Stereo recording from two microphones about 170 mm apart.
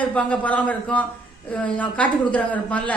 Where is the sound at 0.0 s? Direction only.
10° left (ahead or behind).